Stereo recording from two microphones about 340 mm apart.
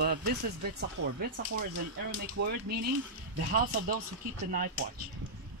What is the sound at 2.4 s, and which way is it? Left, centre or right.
Speech, right.